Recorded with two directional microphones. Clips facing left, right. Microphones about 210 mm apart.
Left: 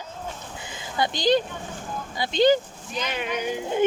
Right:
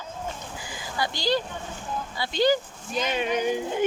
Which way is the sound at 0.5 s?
25° left (ahead or behind).